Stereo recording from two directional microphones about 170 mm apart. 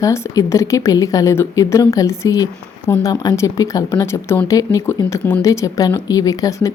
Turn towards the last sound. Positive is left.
turn(degrees=20)  # may be behind; listen again after turning